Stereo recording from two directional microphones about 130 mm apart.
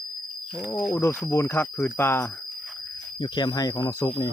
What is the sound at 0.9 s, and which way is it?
Speech, 20° left (ahead or behind).